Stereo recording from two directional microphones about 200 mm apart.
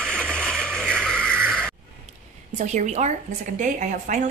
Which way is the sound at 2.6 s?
35° right (ahead or behind).